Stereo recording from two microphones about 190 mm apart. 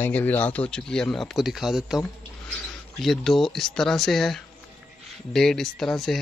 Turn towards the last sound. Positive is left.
turn(degrees=0)  # may be behind; listen again after turning